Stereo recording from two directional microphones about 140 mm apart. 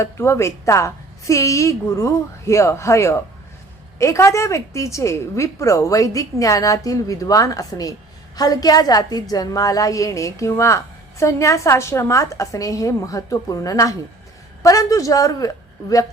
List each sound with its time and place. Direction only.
0.0 s a woman's voice: 20° left (ahead or behind)